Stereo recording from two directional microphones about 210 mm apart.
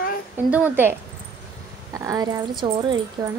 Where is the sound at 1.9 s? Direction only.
15° right (ahead or behind).